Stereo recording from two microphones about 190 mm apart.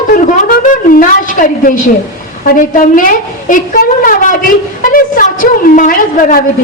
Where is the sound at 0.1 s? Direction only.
45° left (ahead or behind).